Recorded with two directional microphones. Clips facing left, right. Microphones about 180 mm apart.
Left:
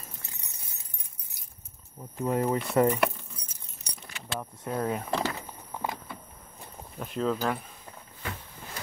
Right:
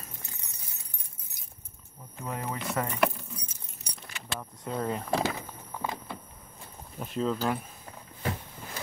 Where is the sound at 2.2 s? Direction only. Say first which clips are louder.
Left 8 dB; 30° left (ahead or behind).